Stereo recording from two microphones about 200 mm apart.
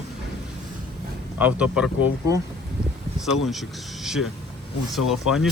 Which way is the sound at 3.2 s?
Centre (ahead or behind).